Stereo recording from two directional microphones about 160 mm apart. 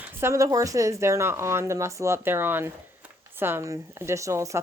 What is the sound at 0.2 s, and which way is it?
Speech, 20° right (ahead or behind).